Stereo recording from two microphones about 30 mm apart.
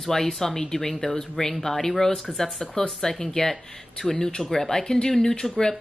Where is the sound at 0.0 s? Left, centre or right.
Centre.